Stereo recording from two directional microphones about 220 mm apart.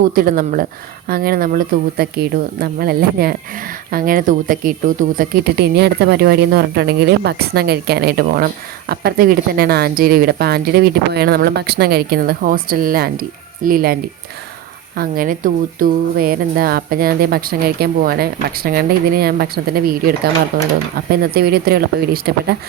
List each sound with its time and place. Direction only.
0.1 s speech: 40° right (ahead or behind)